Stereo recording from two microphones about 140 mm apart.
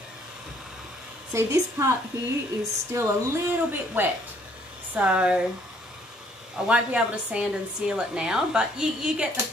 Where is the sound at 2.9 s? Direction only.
20° right (ahead or behind).